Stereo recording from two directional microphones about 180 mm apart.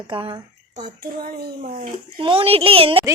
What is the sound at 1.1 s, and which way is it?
Speech, 55° right (ahead or behind).